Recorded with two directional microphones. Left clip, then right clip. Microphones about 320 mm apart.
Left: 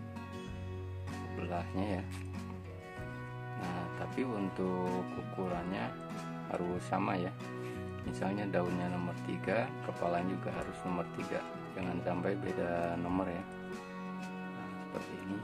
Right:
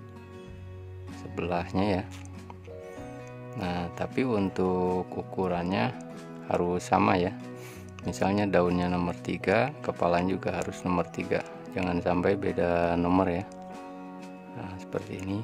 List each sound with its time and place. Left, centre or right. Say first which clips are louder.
1.3 s speech: right 10 dB; right
3.6 s speech: right 8 dB; right